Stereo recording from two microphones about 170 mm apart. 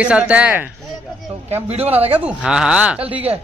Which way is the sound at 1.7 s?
35° right (ahead or behind).